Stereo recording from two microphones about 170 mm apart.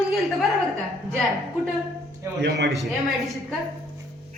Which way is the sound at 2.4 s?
90° right.